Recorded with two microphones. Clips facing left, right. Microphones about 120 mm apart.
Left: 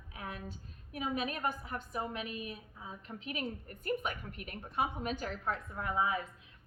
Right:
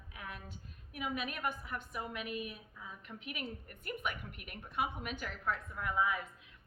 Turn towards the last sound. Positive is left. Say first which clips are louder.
# left 1 dB
turn(degrees=30)  # may be behind; listen again after turning